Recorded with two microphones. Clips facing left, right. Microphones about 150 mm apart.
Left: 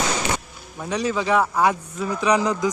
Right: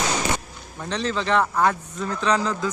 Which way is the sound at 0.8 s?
10° left (ahead or behind).